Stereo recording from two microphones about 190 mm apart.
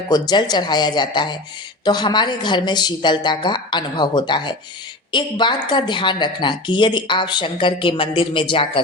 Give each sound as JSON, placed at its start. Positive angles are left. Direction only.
{"t": 0.1, "sound": "speech", "side_deg": 20}